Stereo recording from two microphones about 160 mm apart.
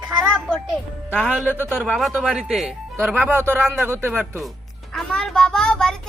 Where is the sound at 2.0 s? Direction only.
Centre (ahead or behind).